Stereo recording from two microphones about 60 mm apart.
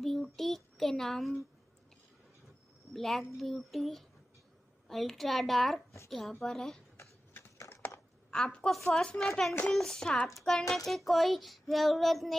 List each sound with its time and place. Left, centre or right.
0.0 s child singing: centre
2.9 s a woman's voice: centre
3.3 s child singing: centre
6.4 s a woman's voice: centre
7.3 s a sound: left
8.3 s a woman's voice: centre
10.2 s child singing: centre